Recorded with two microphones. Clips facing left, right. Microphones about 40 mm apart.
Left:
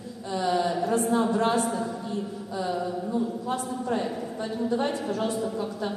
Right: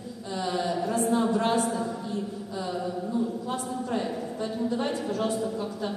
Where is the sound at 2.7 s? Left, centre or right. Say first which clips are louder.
Left 2 dB; centre.